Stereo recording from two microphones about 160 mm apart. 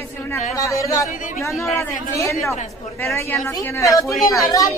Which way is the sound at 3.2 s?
15° left (ahead or behind).